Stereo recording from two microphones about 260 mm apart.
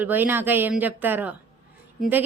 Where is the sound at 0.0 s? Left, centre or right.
Centre.